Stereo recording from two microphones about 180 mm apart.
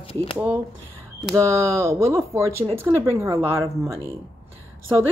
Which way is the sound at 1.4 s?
15° right (ahead or behind).